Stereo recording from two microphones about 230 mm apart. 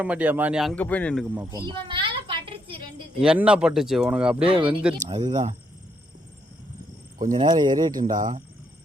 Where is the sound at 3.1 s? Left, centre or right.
Centre.